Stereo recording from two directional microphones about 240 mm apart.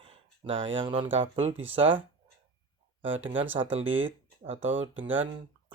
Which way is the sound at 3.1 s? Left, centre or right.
Right.